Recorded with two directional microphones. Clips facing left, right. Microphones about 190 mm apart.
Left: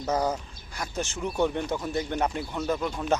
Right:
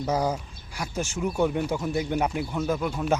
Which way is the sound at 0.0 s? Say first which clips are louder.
Right 1 dB; 10° right (ahead or behind).